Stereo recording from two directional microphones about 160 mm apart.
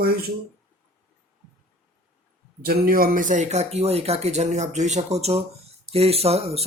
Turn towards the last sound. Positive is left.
turn(degrees=-40)  # may be behind; listen again after turning